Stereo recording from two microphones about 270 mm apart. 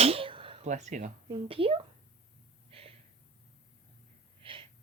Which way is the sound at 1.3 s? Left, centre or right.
Centre.